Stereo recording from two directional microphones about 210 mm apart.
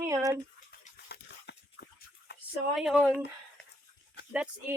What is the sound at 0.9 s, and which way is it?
Horse, 50° left (ahead or behind).